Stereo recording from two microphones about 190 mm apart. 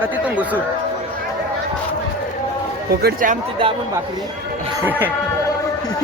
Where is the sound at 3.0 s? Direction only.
50° right (ahead or behind).